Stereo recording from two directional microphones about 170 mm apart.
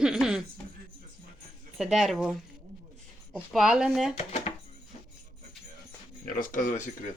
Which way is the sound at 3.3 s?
5° right (ahead or behind).